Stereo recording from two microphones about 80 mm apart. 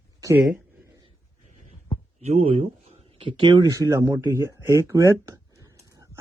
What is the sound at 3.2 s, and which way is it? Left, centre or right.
Speech, right.